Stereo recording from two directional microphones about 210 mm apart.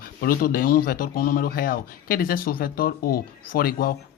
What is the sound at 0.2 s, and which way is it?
Speech, 45° left (ahead or behind).